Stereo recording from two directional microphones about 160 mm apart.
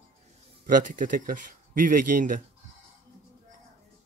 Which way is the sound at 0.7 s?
55° right (ahead or behind).